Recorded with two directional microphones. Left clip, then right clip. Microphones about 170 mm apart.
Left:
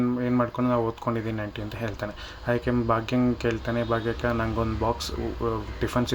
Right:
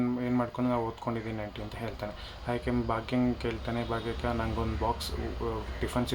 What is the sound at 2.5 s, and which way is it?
Speech, 15° left (ahead or behind).